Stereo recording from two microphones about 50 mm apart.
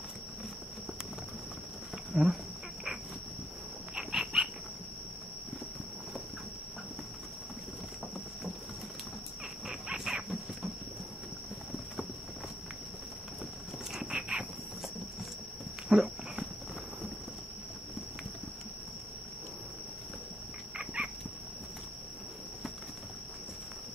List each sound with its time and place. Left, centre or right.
2.1 s speech: centre
3.9 s dog: centre
9.7 s wild animals: centre
13.9 s dog: centre
15.9 s dog: centre
20.7 s a sound: right